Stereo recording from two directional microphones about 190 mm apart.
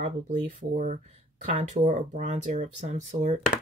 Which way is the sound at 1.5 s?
35° right (ahead or behind).